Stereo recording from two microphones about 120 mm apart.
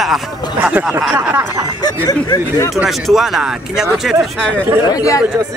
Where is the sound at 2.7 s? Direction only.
Centre (ahead or behind).